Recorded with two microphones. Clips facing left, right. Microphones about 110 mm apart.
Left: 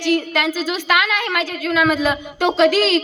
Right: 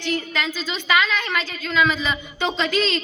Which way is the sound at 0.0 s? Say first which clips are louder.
Left 7 dB; 65° left (ahead or behind).